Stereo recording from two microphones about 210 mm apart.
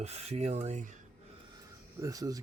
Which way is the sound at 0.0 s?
30° right (ahead or behind).